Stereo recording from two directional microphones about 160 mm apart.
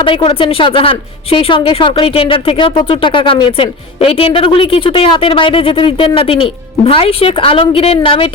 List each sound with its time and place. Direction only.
0.0 s a woman's voice: 35° left (ahead or behind)